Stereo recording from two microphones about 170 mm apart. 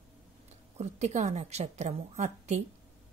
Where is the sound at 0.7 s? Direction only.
40° right (ahead or behind).